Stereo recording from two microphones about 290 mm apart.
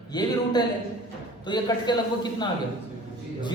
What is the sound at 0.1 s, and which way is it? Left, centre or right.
A man's voice, centre.